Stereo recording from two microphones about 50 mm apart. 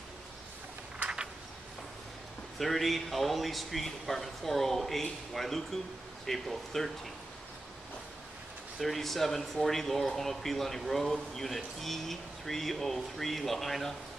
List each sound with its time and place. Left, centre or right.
1.0 s a sound: centre
2.6 s speech: centre
8.7 s speech: centre